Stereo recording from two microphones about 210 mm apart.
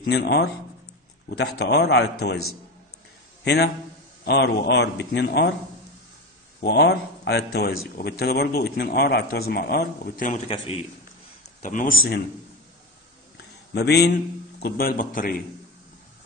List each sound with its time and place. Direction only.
0.0 s speech: 50° left (ahead or behind)
3.4 s speech: 50° left (ahead or behind)
6.6 s speech: 50° left (ahead or behind)
10.5 s a man's voice: 25° left (ahead or behind)
11.6 s a man's voice: 40° left (ahead or behind)
13.7 s speech: 50° left (ahead or behind)